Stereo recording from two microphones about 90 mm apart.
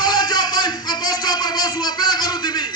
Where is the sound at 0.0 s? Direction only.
50° left (ahead or behind).